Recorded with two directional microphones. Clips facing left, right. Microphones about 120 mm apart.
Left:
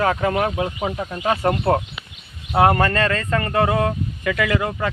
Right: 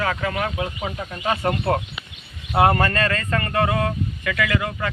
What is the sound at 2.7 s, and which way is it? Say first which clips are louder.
Speech: left 2 dB; 5° left (ahead or behind).